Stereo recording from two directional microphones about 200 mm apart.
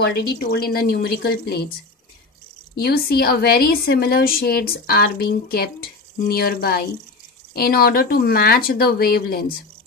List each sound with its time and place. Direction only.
0.0 s a woman's voice: 50° left (ahead or behind)
2.7 s a woman's voice: 50° left (ahead or behind)